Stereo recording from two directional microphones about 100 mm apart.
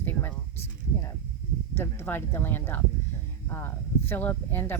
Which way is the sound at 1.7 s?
20° left (ahead or behind).